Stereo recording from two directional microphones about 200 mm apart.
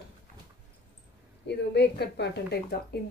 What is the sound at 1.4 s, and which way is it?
A woman's voice, 60° left (ahead or behind).